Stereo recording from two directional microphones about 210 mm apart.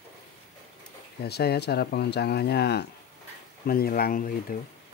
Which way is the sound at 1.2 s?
50° left (ahead or behind).